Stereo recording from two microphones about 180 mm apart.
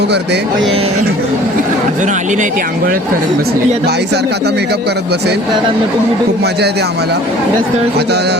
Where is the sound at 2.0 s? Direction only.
45° right (ahead or behind).